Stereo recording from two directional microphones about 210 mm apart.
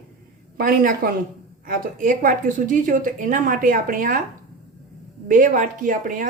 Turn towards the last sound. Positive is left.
turn(degrees=-40)  # may be behind; listen again after turning